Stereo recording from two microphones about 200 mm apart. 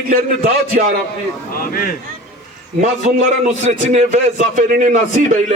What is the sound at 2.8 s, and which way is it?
A man's voice, 40° right (ahead or behind).